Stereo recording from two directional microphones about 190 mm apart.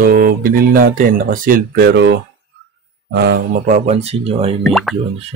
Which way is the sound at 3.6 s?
40° right (ahead or behind).